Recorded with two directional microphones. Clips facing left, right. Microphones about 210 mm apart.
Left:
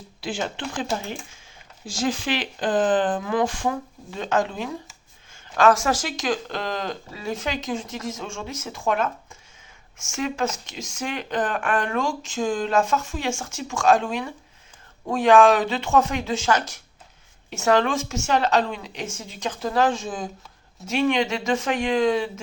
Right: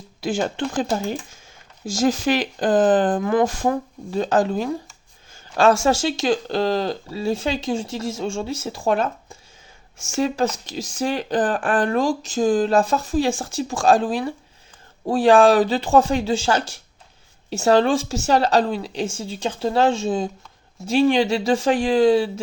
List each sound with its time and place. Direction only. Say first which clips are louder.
0.2 s speech: right 6 dB; 45° right (ahead or behind)